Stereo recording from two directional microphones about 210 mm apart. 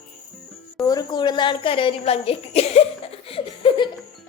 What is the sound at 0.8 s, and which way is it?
A woman's voice, 15° left (ahead or behind).